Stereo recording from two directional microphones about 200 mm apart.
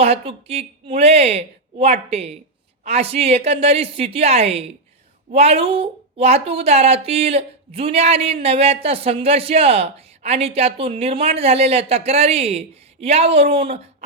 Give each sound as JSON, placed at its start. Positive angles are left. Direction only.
{"t": 0.0, "sound": "a woman's voice", "side_deg": -30}